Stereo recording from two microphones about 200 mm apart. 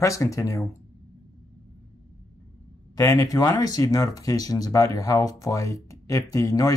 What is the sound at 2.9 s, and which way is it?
Speech, 15° left (ahead or behind).